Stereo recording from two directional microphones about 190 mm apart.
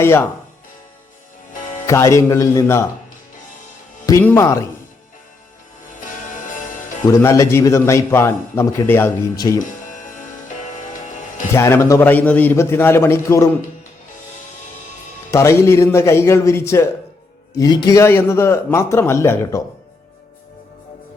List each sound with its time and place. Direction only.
0.0 s a man's voice: 10° left (ahead or behind)
1.9 s a man's voice: 15° left (ahead or behind)
4.0 s a man's voice: 15° left (ahead or behind)
7.1 s a man's voice: 15° left (ahead or behind)
11.5 s a man's voice: 15° left (ahead or behind)
15.3 s a man's voice: 15° left (ahead or behind)